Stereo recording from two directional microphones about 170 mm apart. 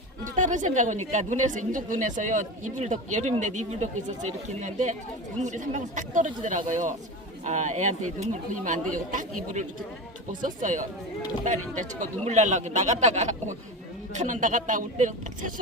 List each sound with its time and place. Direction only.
0.3 s a woman's voice: 50° right (ahead or behind)